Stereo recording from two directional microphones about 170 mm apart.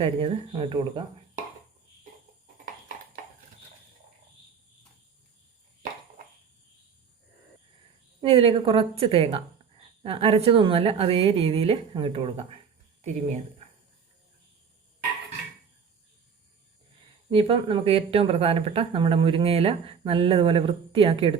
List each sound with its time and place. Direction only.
0.0 s a woman's voice: 35° right (ahead or behind)
8.2 s a woman's voice: 35° right (ahead or behind)
17.3 s a woman's voice: 30° right (ahead or behind)